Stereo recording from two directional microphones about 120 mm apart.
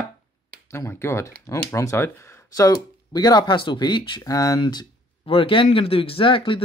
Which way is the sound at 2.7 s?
35° left (ahead or behind).